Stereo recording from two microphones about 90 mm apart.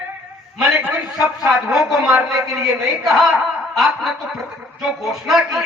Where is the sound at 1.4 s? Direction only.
5° right (ahead or behind).